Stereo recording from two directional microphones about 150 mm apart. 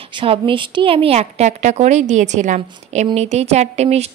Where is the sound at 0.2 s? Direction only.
35° right (ahead or behind).